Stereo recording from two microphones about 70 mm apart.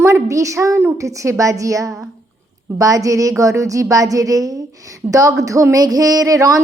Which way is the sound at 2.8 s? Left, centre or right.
Right.